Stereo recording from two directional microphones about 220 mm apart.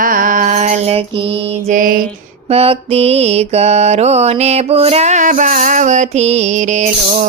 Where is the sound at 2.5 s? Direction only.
25° right (ahead or behind).